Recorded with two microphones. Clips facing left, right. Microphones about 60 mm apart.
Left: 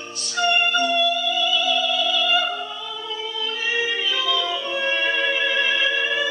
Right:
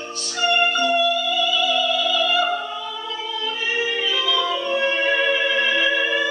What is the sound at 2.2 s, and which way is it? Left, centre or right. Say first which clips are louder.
Opera: right 2 dB; centre.